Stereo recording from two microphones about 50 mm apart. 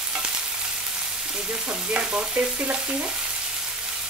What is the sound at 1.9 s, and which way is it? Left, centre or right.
Speech, right.